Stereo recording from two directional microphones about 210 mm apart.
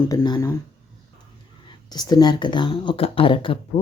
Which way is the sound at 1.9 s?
20° left (ahead or behind).